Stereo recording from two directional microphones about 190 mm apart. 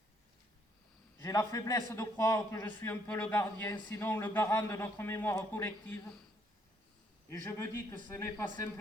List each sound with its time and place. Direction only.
1.2 s a man's voice: 15° left (ahead or behind)
7.3 s a man's voice: 10° left (ahead or behind)